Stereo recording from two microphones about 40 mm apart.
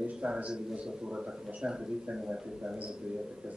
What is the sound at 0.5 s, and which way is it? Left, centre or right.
Speech, right.